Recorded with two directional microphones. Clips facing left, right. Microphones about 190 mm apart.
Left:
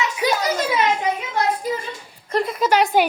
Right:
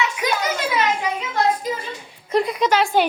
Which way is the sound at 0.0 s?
35° left (ahead or behind).